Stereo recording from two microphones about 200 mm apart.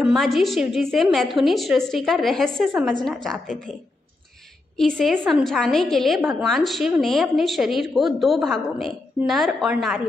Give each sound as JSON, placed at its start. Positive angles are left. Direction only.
{"t": 0.0, "sound": "a woman's voice", "side_deg": 0}
{"t": 4.7, "sound": "a woman's voice", "side_deg": 0}